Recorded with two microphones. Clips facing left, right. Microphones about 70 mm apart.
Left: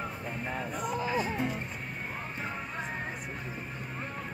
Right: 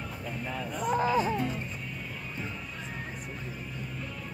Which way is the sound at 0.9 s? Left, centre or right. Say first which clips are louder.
Right 6 dB; right.